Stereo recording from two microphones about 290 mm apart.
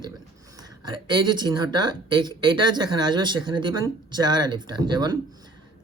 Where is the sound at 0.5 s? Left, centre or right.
Centre.